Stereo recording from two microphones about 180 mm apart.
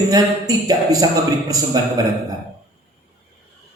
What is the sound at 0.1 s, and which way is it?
Speech, 20° right (ahead or behind).